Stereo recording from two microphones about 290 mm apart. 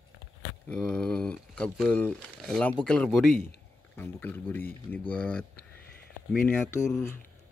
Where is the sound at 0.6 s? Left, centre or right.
Centre.